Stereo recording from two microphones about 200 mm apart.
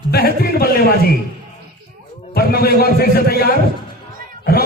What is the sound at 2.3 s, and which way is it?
A man's voice, 50° left (ahead or behind).